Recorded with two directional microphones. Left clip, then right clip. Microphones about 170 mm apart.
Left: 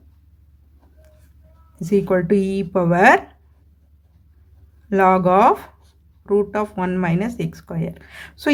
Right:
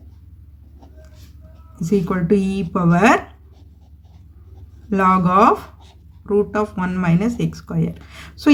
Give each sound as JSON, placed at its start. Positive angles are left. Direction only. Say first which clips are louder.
{"t": 1.7, "sound": "speech", "louder": "left 3 dB", "side_deg": 35}
{"t": 4.9, "sound": "speech", "louder": "left 1 dB", "side_deg": 35}